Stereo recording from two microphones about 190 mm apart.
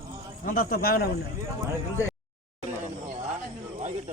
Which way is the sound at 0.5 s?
50° left (ahead or behind).